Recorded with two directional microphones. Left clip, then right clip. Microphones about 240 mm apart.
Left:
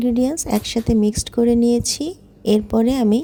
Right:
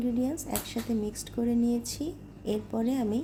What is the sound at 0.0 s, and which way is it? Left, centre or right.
A woman's voice, left.